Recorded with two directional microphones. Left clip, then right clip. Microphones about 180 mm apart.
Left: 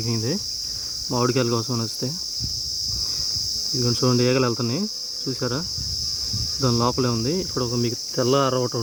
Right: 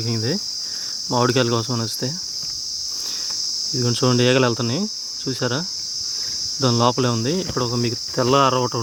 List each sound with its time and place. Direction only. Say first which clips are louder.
1.1 s cricket: right 4 dB; 15° right (ahead or behind)
3.8 s cricket: right 2 dB; 15° right (ahead or behind)
6.6 s cricket: right 4 dB; 15° right (ahead or behind)